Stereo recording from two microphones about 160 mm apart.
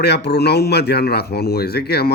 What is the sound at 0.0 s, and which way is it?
A man's voice, 90° left.